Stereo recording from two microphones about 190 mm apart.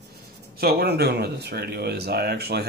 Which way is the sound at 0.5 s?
55° right (ahead or behind).